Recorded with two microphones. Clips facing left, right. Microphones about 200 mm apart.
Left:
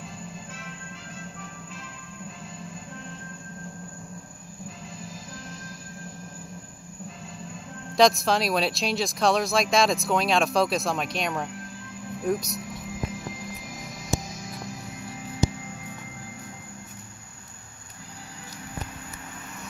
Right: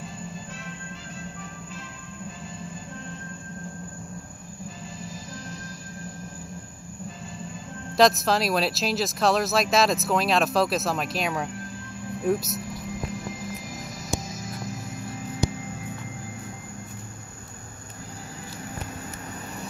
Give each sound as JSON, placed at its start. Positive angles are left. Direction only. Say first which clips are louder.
{"t": 0.0, "sound": "music", "louder": "right 2 dB", "side_deg": 0}
{"t": 5.0, "sound": "music", "louder": "right 2 dB", "side_deg": 0}
{"t": 7.3, "sound": "music", "louder": "right 2 dB", "side_deg": 0}